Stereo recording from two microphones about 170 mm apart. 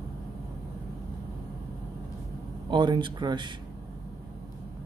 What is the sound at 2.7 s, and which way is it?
Speech, 25° right (ahead or behind).